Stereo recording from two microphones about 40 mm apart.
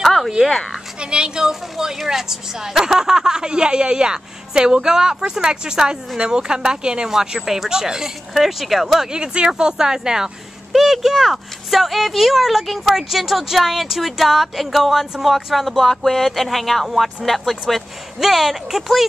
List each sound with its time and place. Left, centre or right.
0.0 s a sound: centre
1.1 s a woman's voice: centre
9.1 s a woman's voice: right; by 19.0 s centre